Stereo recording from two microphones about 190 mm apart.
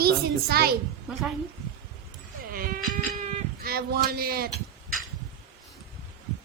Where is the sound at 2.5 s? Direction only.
50° right (ahead or behind).